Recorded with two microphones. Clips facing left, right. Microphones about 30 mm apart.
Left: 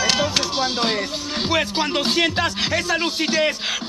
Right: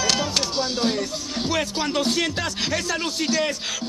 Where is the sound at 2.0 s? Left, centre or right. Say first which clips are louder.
Left 4 dB; left.